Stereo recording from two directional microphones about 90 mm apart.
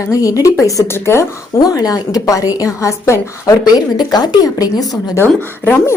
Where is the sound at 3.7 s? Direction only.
50° left (ahead or behind).